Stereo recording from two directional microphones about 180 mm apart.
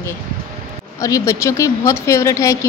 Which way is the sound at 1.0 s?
20° left (ahead or behind).